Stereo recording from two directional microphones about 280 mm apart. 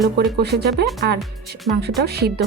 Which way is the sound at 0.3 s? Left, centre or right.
Right.